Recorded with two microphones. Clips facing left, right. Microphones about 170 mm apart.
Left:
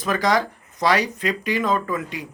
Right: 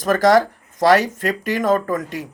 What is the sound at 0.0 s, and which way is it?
Speech, 45° right (ahead or behind).